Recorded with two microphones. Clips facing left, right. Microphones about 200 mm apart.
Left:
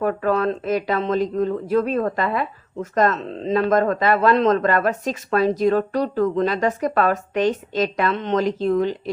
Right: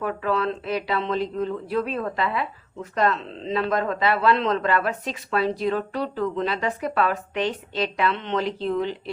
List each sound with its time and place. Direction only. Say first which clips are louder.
0.0 s speech: left 5 dB; 45° left (ahead or behind)